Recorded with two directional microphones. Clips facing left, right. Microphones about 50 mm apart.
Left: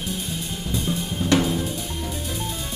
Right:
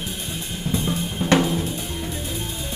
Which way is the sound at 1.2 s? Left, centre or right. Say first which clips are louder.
Right 2 dB; right.